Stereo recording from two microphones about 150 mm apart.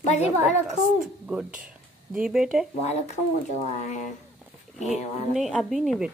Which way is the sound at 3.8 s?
55° left (ahead or behind).